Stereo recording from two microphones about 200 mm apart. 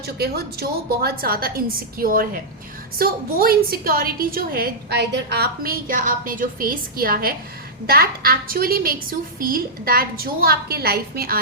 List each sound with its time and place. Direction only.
0.2 s a woman's voice: 50° right (ahead or behind)